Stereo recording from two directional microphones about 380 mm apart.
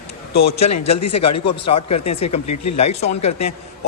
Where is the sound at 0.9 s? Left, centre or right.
Centre.